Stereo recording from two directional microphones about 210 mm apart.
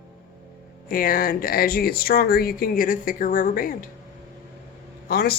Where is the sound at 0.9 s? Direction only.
40° left (ahead or behind).